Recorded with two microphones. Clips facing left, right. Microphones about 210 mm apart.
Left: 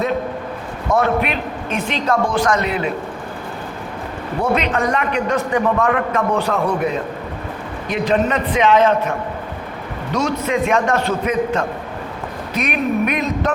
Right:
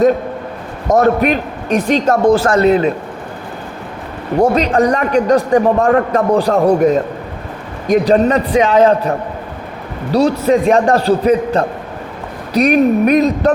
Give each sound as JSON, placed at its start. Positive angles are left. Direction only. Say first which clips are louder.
{"t": 0.9, "sound": "a man's voice", "louder": "right 6 dB", "side_deg": -45}
{"t": 4.4, "sound": "a man's voice", "louder": "right 7 dB", "side_deg": -35}